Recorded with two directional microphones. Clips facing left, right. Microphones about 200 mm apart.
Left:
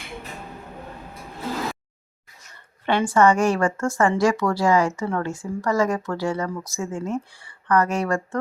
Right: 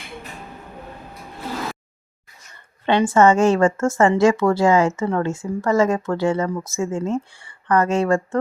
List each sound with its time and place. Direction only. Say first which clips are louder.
2.8 s a woman's voice: right 3 dB; 25° right (ahead or behind)